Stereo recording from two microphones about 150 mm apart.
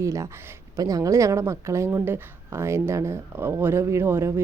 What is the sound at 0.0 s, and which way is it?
A woman's voice, 20° right (ahead or behind).